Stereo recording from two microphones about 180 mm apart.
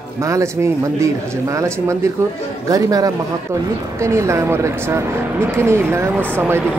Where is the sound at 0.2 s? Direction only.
15° right (ahead or behind).